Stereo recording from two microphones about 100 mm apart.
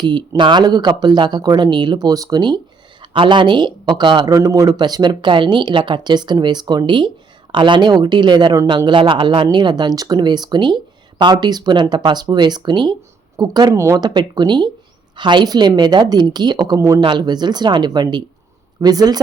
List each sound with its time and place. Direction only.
0.0 s speech: 50° right (ahead or behind)
3.0 s speech: 55° right (ahead or behind)
13.7 s speech: 30° right (ahead or behind)
14.0 s speech: 45° right (ahead or behind)
17.0 s speech: 50° right (ahead or behind)